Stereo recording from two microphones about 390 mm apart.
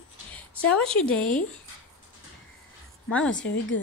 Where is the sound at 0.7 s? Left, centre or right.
Centre.